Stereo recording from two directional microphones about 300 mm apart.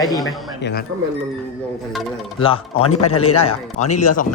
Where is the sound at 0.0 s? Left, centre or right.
Centre.